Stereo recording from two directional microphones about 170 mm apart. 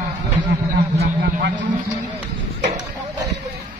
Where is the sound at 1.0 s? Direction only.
70° right (ahead or behind).